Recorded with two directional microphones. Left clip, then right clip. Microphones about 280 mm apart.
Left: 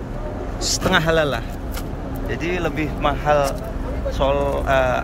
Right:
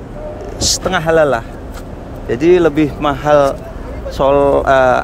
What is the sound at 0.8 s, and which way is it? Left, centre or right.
Speech, centre.